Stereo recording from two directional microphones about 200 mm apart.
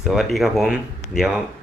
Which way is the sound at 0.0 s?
Centre (ahead or behind).